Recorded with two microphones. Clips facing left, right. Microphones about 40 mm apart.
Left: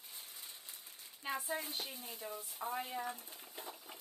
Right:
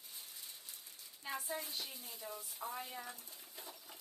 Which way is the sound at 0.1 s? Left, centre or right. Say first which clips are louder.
Left 1 dB; centre.